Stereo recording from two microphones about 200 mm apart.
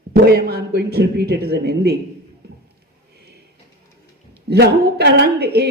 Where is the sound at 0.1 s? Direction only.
50° right (ahead or behind).